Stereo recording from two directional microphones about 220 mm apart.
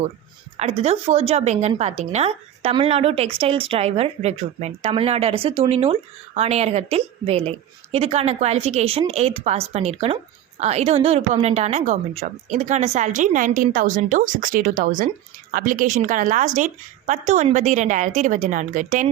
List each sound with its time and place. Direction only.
0.5 s a woman's voice: 30° right (ahead or behind)